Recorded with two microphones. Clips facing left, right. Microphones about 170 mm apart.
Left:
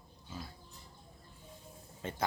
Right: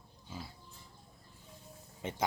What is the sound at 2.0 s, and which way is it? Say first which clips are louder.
Speech: right 1 dB; 20° right (ahead or behind).